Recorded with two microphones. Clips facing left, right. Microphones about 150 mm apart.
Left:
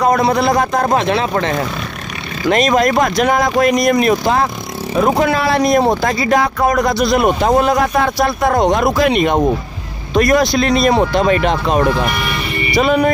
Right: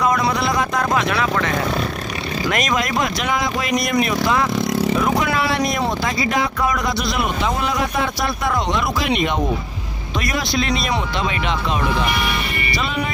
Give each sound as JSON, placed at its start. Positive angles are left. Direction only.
{"t": 0.0, "sound": "speech", "side_deg": 40}
{"t": 2.5, "sound": "speech", "side_deg": 35}